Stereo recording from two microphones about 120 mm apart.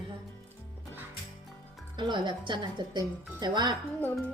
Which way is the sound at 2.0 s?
40° right (ahead or behind).